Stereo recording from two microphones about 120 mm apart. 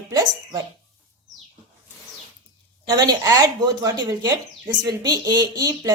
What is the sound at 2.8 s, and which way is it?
Speech, 35° right (ahead or behind).